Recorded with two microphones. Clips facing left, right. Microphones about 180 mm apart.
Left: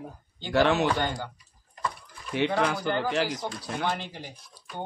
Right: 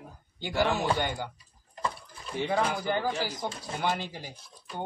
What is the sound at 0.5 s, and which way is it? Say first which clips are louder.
Speech: left 5 dB; 75° left (ahead or behind).